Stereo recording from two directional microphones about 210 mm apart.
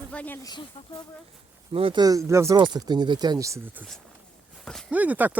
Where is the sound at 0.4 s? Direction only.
20° left (ahead or behind).